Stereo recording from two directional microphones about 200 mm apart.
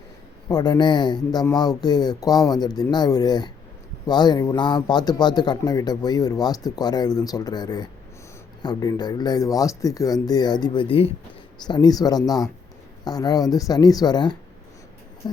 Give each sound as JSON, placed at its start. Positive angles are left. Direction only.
{"t": 0.4, "sound": "a man's voice", "side_deg": 20}